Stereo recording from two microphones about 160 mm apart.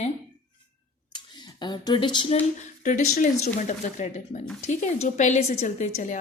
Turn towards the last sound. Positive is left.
turn(degrees=55)  # may be behind; listen again after turning